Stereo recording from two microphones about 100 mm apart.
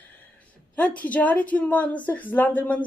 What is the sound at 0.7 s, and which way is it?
Speech, 15° left (ahead or behind).